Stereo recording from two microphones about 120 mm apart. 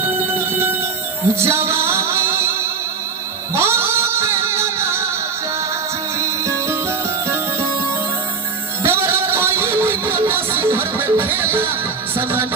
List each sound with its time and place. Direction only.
1.4 s music: 20° right (ahead or behind)
6.1 s music: 25° right (ahead or behind)
8.8 s music: 20° right (ahead or behind)